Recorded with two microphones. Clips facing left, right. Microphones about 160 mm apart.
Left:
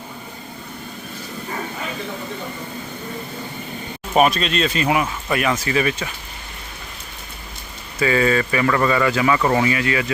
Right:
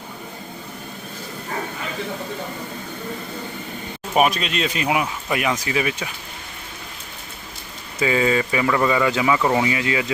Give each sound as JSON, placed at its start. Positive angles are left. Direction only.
{"t": 4.1, "sound": "speech", "side_deg": -10}
{"t": 7.9, "sound": "speech", "side_deg": -15}